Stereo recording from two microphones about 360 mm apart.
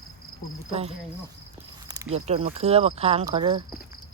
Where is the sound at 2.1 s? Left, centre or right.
Centre.